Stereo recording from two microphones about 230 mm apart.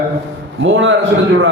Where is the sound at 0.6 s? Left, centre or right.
Right.